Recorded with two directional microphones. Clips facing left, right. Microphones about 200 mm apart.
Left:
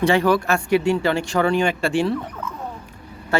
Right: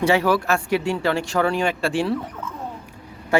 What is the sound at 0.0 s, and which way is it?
Speech, 5° right (ahead or behind).